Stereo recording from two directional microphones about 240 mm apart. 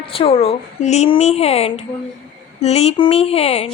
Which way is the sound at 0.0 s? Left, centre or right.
Left.